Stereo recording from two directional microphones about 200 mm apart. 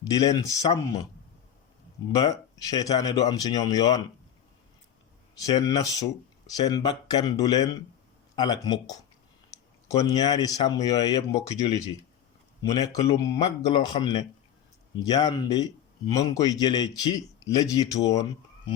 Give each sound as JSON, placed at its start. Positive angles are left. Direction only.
{"t": 0.0, "sound": "a man's voice", "side_deg": 20}
{"t": 2.1, "sound": "a man's voice", "side_deg": 20}
{"t": 5.4, "sound": "a man's voice", "side_deg": 20}
{"t": 10.0, "sound": "a man's voice", "side_deg": 20}
{"t": 12.6, "sound": "a man's voice", "side_deg": 20}